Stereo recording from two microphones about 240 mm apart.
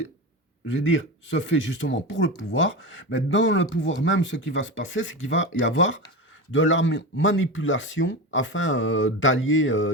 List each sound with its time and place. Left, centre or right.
0.7 s speech: left